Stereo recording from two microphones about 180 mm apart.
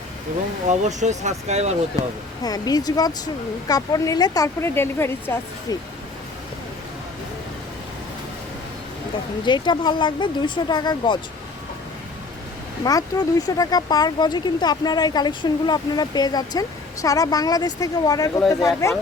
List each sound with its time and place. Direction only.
0.7 s speech: 40° right (ahead or behind)
2.0 s speech: 20° left (ahead or behind)
9.4 s speech: 25° left (ahead or behind)
12.8 s speech: 20° left (ahead or behind)